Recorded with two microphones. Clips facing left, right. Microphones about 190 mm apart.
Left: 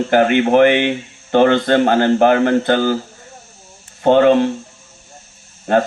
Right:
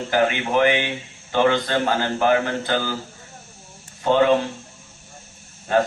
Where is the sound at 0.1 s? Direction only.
55° left (ahead or behind).